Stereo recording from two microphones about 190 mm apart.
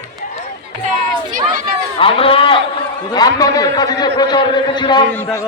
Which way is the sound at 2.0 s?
30° left (ahead or behind).